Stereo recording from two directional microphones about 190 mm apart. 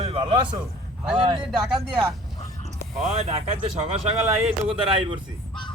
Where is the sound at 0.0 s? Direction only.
30° right (ahead or behind).